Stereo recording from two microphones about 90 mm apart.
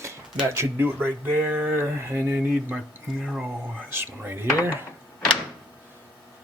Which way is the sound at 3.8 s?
25° right (ahead or behind).